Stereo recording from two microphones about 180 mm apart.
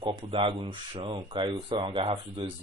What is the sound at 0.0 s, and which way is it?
Speech, 30° right (ahead or behind).